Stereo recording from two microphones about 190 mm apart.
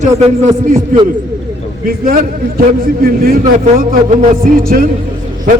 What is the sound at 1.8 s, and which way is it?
A man's voice, 50° right (ahead or behind).